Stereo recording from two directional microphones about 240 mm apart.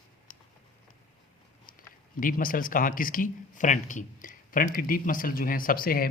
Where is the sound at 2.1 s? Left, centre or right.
Left.